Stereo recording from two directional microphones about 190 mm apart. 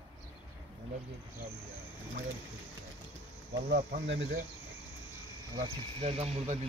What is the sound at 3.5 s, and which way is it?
Speech, 65° right (ahead or behind).